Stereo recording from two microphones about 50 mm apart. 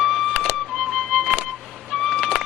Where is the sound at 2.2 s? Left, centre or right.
Centre.